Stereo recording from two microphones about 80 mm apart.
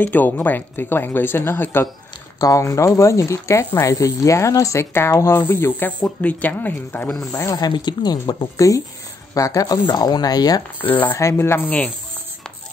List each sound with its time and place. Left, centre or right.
0.0 s speech: left
2.4 s speech: left
7.2 s speech: left
7.5 s speech: left
8.5 s speech: left
9.9 s speech: left
10.8 s speech: left
11.6 s speech: centre